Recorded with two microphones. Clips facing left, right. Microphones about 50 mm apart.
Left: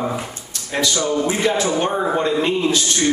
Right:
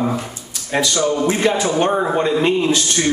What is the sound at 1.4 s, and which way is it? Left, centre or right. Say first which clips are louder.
A man's voice: right 2 dB; centre.